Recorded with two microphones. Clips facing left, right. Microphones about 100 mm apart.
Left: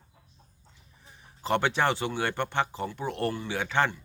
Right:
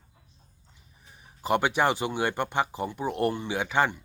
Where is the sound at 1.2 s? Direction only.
15° right (ahead or behind).